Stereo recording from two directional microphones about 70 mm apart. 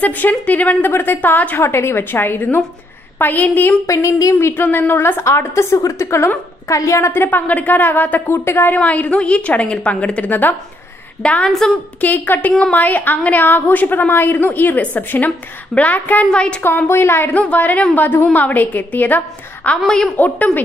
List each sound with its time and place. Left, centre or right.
0.0 s a woman's voice: left
1.6 s a woman's voice: left
3.8 s a woman's voice: left
7.1 s a woman's voice: left
8.3 s a woman's voice: left
8.7 s a woman's voice: left
16.6 s a woman's voice: left
17.3 s a woman's voice: left